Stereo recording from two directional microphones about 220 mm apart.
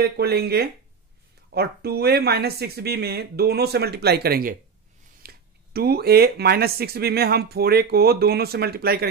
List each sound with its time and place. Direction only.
0.0 s speech: 45° right (ahead or behind)